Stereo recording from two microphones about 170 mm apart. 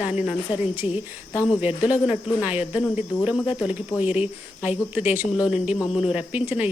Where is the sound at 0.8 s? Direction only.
35° left (ahead or behind).